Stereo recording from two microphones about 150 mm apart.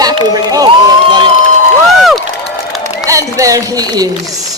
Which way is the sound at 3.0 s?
20° right (ahead or behind).